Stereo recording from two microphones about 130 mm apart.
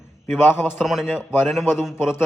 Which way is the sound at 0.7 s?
Centre (ahead or behind).